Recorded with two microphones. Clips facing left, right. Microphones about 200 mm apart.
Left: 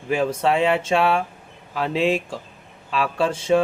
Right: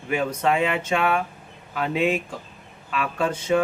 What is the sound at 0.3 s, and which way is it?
Speech, 30° left (ahead or behind).